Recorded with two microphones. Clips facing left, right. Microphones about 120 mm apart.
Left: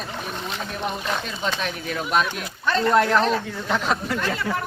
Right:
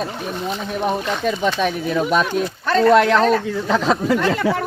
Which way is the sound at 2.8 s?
90° right.